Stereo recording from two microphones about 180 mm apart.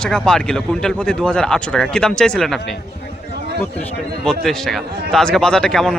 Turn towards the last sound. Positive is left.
turn(degrees=0)  # may be behind; listen again after turning